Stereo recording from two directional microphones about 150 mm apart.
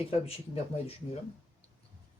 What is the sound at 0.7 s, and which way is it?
Speech, 40° left (ahead or behind).